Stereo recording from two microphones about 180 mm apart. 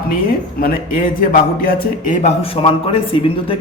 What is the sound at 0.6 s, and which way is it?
A man's voice, 55° left (ahead or behind).